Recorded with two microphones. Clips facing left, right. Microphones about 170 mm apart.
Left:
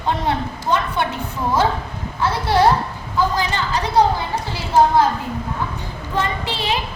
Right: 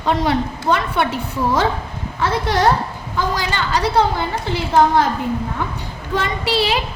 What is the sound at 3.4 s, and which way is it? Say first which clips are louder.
Speech: right 1 dB; 90° right.